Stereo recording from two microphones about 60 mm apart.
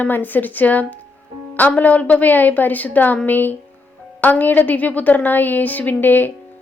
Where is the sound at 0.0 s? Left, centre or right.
Left.